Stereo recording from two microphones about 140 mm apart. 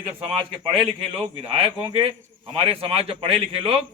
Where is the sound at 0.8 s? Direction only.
40° right (ahead or behind).